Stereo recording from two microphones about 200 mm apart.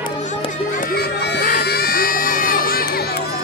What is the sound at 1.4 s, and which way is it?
Crowd, 45° left (ahead or behind).